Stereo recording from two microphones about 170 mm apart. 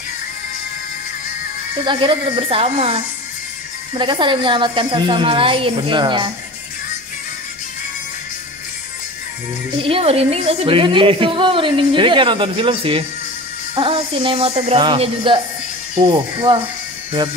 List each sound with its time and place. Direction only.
1.9 s a woman's voice: 30° right (ahead or behind)
9.8 s a woman's voice: 35° right (ahead or behind)